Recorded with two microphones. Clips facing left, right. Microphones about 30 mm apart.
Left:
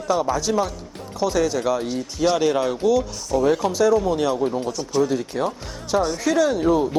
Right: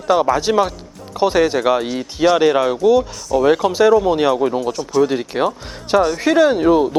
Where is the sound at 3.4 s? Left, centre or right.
Right.